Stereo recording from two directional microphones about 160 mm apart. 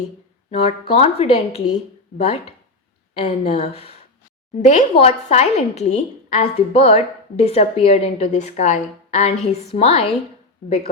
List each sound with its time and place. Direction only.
0.5 s a woman's voice: 40° left (ahead or behind)